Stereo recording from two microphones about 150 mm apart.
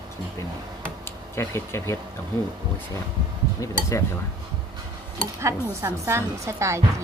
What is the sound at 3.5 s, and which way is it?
Speech, 20° left (ahead or behind).